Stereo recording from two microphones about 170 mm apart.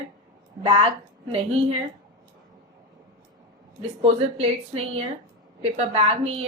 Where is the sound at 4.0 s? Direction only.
35° right (ahead or behind).